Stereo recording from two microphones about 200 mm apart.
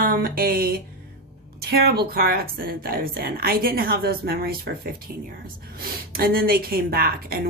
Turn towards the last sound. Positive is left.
turn(degrees=-50)  # may be behind; listen again after turning